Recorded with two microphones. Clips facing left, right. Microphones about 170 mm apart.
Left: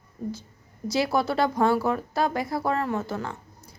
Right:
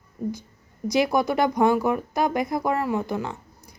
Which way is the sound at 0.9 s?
15° right (ahead or behind).